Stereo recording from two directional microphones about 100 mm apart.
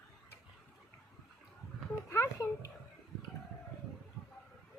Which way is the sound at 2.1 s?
30° left (ahead or behind).